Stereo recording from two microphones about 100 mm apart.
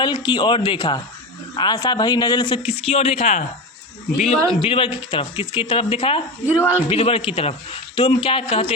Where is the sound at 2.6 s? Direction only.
75° left (ahead or behind).